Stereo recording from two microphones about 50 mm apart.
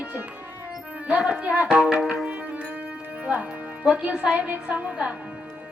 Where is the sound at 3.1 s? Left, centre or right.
Right.